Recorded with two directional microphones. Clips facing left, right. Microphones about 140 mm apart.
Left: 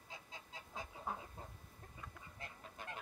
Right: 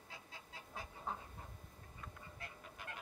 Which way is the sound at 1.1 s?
10° left (ahead or behind).